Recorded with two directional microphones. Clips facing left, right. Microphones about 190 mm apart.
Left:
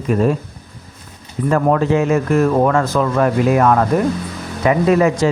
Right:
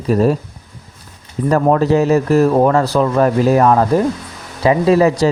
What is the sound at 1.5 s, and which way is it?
Speech, 35° right (ahead or behind).